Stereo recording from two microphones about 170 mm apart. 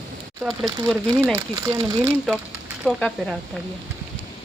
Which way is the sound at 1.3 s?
20° right (ahead or behind).